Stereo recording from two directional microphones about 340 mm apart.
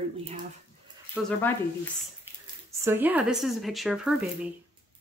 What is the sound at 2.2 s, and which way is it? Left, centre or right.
Speech, centre.